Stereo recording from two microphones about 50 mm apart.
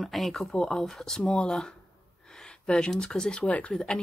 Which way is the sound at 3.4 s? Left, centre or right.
Left.